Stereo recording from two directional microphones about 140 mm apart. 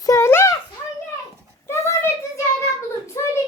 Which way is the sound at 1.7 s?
20° left (ahead or behind).